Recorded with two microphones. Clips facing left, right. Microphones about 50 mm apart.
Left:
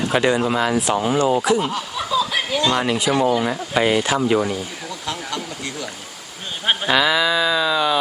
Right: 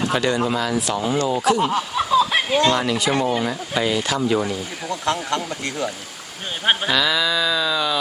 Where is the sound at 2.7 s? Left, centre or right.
Centre.